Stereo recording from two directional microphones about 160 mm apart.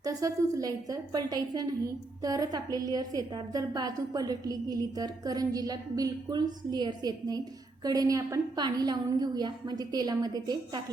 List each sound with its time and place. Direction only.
0.0 s a woman's voice: 20° right (ahead or behind)